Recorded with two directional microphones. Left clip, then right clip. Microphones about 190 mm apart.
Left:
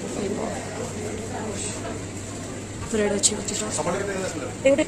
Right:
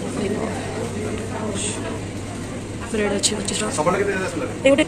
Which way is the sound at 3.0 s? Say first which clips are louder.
Right 2 dB; 20° left (ahead or behind).